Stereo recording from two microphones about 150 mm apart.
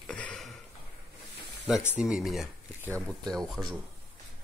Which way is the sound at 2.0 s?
Centre (ahead or behind).